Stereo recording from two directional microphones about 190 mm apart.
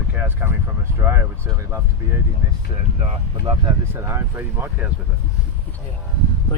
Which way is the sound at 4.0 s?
15° right (ahead or behind).